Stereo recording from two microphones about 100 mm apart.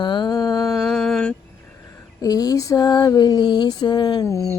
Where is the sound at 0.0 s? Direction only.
50° left (ahead or behind).